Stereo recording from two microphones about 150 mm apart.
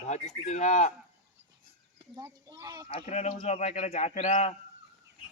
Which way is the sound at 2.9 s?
45° left (ahead or behind).